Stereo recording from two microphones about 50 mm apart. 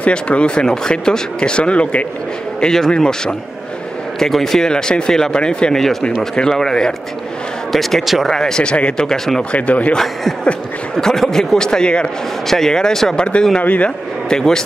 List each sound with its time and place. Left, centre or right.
0.0 s speech: left
2.6 s speech: centre
7.7 s a man's voice: centre
8.3 s speech: centre
9.0 s speech: centre
9.5 s speech: left
11.0 s speech: centre
12.4 s speech: centre
13.6 s speech: left
14.3 s speech: centre